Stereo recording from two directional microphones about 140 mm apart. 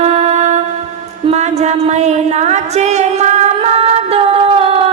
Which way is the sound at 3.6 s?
50° right (ahead or behind).